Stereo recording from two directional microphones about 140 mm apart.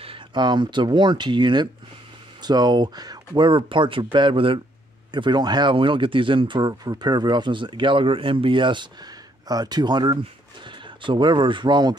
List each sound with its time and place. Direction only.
0.0 s speech: 35° right (ahead or behind)